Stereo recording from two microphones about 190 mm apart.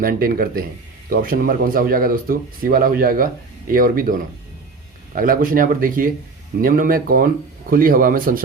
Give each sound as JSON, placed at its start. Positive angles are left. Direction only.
{"t": 0.0, "sound": "speech", "side_deg": -50}